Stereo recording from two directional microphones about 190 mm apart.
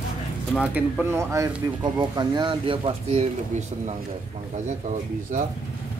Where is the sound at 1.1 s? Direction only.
15° right (ahead or behind); by 3.9 s 35° right (ahead or behind).